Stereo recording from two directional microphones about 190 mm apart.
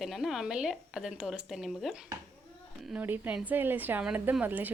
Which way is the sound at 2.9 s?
10° right (ahead or behind).